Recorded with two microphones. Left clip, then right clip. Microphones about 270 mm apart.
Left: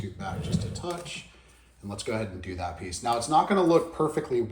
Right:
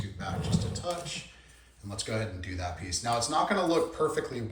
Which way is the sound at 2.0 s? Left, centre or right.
Centre.